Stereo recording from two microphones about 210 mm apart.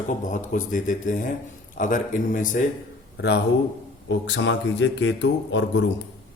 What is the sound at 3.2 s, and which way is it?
Speech, 55° left (ahead or behind).